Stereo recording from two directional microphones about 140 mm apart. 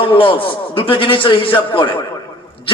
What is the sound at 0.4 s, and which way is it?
A man's voice, 40° left (ahead or behind).